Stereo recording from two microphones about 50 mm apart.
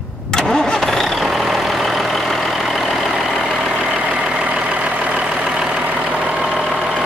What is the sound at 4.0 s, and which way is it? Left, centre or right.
Vehicle, right.